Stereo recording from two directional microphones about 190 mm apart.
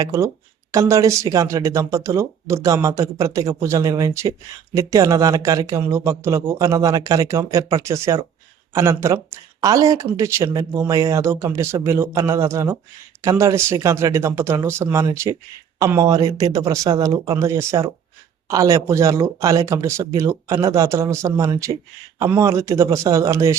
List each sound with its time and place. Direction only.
0.0 s speech: 15° right (ahead or behind)